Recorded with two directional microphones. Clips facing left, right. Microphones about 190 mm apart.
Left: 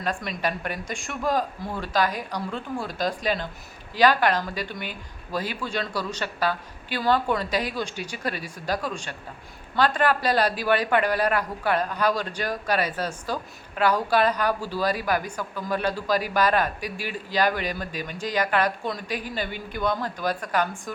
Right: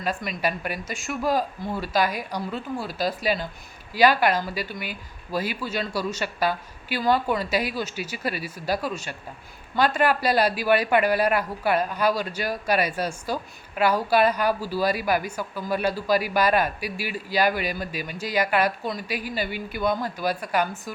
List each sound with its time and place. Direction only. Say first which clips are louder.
0.0 s speech: right 1 dB; 5° right (ahead or behind)